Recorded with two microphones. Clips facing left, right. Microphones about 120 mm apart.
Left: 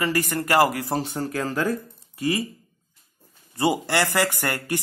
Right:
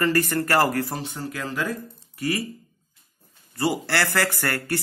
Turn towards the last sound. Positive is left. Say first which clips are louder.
# even
turn(degrees=15)  # may be behind; listen again after turning